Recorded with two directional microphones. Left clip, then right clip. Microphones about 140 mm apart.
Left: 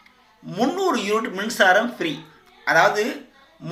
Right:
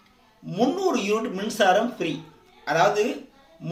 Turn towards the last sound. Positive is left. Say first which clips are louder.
# left 3 dB
turn(degrees=-15)  # may be behind; listen again after turning